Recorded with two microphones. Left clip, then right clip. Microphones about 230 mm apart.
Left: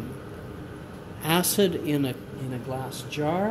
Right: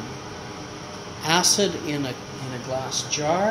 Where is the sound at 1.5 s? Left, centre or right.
Left.